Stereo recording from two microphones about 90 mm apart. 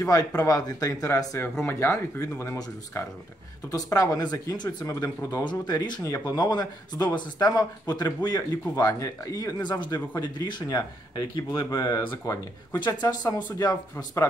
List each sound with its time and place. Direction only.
0.0 s speech: 40° left (ahead or behind)
1.4 s speech: 25° left (ahead or behind)
3.6 s speech: 40° left (ahead or behind)
5.4 s speech: 50° left (ahead or behind)
9.6 s speech: 55° left (ahead or behind)
11.7 s speech: 40° left (ahead or behind)